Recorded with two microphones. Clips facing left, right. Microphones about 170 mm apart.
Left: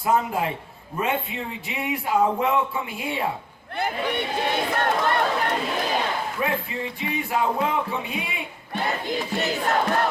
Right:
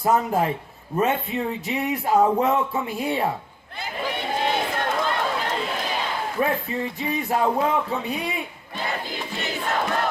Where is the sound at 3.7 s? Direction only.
60° left (ahead or behind).